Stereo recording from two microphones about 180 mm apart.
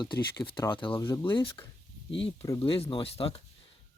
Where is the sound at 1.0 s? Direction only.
15° left (ahead or behind).